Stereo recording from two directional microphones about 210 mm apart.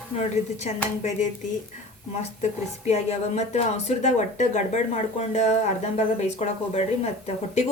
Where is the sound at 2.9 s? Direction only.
30° left (ahead or behind).